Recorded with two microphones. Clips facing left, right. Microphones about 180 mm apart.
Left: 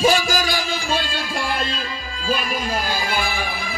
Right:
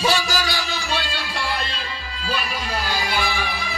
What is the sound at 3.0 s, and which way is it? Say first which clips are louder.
Music: even; 45° left (ahead or behind).